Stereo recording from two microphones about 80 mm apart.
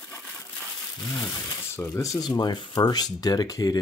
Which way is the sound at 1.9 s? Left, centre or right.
Left.